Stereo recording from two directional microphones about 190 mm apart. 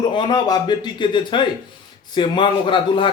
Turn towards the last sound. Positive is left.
turn(degrees=25)  # may be behind; listen again after turning